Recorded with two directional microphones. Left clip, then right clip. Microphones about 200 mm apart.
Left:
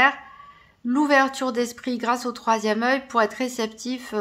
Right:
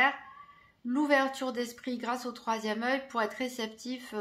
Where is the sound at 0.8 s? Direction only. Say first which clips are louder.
Left 8 dB; 30° left (ahead or behind).